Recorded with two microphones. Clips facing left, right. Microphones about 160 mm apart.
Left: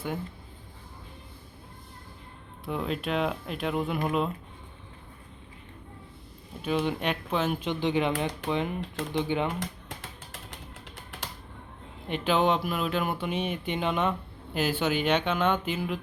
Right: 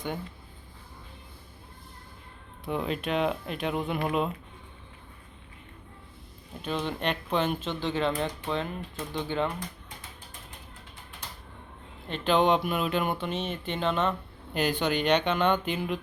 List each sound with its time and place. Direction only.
2.6 s speech: centre (ahead or behind)
6.6 s speech: 5° left (ahead or behind)
7.7 s speech: 15° left (ahead or behind)
10.5 s a sound: 90° left
12.0 s speech: 10° left (ahead or behind)